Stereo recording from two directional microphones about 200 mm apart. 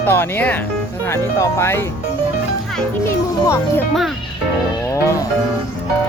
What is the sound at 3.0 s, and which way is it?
Speech, 15° left (ahead or behind).